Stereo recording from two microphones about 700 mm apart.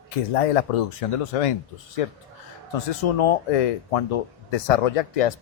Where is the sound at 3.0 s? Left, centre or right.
Left.